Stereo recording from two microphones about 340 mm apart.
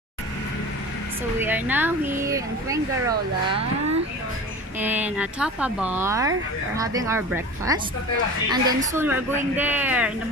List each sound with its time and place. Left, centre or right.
1.4 s speech: centre
4.7 s speech: centre